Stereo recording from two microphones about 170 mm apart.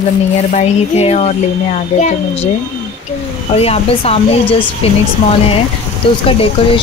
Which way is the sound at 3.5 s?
35° left (ahead or behind).